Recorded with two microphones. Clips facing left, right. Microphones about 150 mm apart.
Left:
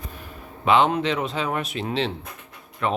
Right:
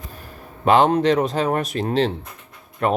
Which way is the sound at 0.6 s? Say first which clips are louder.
Right 4 dB; 40° right (ahead or behind).